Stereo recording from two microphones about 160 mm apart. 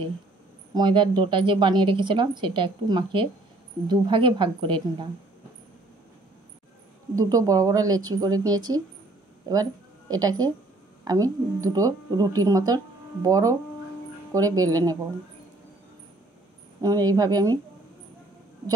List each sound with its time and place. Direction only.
0.7 s a woman's voice: 30° right (ahead or behind)
7.2 s a woman's voice: 20° right (ahead or behind)
16.8 s a woman's voice: 20° right (ahead or behind)